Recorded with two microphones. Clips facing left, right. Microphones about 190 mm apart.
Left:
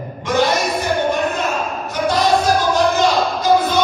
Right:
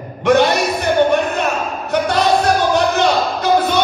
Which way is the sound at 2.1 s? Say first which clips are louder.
Left 1 dB; 65° right (ahead or behind).